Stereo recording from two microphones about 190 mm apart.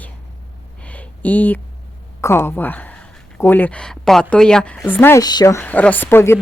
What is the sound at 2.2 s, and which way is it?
Speech, 15° left (ahead or behind).